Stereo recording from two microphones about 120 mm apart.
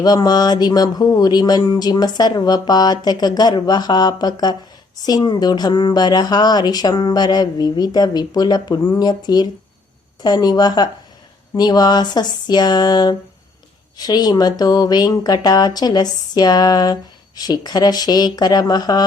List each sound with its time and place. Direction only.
0.0 s speech: 35° left (ahead or behind)